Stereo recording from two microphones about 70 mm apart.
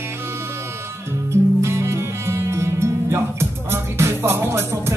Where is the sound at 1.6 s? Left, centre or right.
Right.